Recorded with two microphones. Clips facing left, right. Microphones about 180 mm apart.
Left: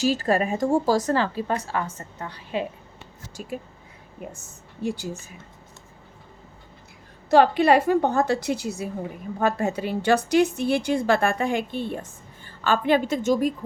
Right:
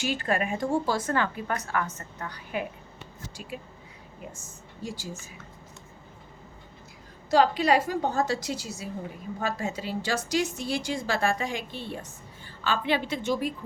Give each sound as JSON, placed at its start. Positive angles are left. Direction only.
{"t": 0.0, "sound": "a woman's voice", "side_deg": 40}
{"t": 3.5, "sound": "a woman's voice", "side_deg": 45}
{"t": 4.2, "sound": "a woman's voice", "side_deg": 55}
{"t": 7.3, "sound": "a woman's voice", "side_deg": 60}